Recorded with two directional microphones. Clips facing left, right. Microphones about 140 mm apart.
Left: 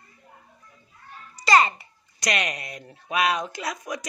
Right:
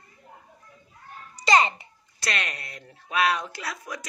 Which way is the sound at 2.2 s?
15° left (ahead or behind).